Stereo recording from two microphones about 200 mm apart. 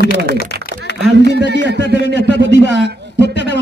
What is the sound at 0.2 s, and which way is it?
A man's voice, 55° right (ahead or behind).